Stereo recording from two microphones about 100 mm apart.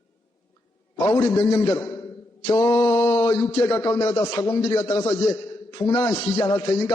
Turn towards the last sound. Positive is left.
turn(degrees=30)  # may be behind; listen again after turning